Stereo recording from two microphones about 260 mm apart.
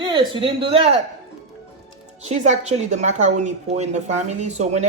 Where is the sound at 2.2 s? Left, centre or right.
Right.